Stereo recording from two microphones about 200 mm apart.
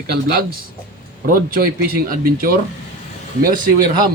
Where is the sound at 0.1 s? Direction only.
50° right (ahead or behind).